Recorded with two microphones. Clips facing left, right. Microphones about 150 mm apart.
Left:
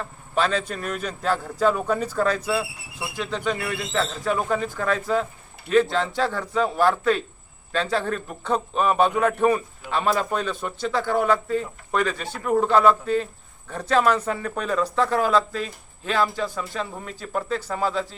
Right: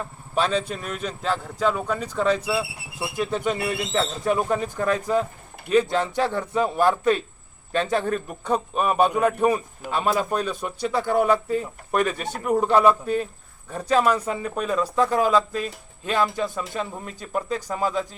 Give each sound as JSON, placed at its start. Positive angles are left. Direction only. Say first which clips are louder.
{"t": 0.4, "sound": "speech", "louder": "even", "side_deg": 0}
{"t": 3.2, "sound": "speech", "louder": "right 2 dB", "side_deg": -20}